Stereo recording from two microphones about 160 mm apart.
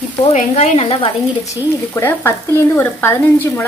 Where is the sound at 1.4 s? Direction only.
20° left (ahead or behind).